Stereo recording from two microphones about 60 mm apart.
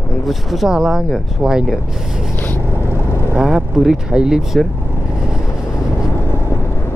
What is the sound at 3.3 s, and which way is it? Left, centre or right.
Speech, centre.